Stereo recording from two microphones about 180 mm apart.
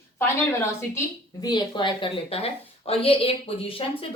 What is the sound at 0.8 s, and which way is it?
A woman's voice, 15° left (ahead or behind).